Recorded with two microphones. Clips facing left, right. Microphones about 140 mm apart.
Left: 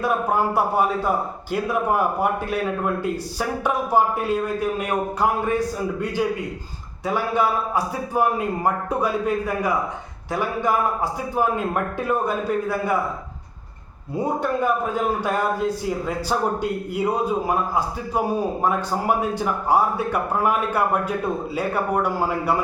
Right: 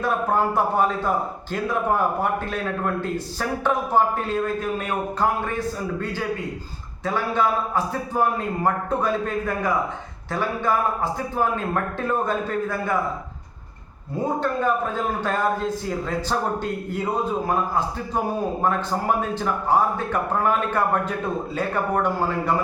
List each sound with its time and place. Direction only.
0.0 s a man's voice: 10° left (ahead or behind)
14.2 s a man's voice: 10° left (ahead or behind)
16.6 s a man's voice: 10° left (ahead or behind)